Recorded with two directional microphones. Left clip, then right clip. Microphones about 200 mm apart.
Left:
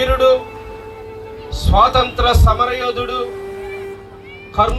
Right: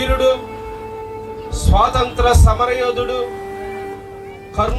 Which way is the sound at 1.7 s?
30° left (ahead or behind).